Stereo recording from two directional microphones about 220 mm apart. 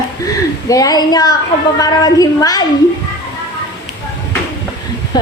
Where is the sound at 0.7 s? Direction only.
15° left (ahead or behind).